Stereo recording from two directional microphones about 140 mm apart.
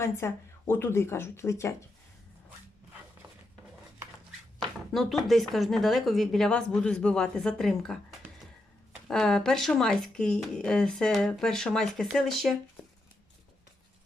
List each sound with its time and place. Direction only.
0.2 s speech: 15° left (ahead or behind)
4.9 s speech: centre (ahead or behind)
9.0 s speech: 5° left (ahead or behind)